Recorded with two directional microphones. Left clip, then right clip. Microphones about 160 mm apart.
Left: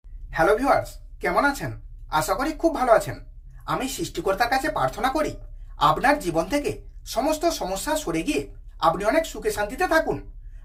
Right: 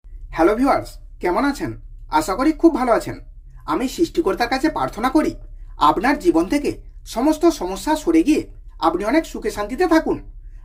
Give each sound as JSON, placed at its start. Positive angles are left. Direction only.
{"t": 0.3, "sound": "speech", "side_deg": -25}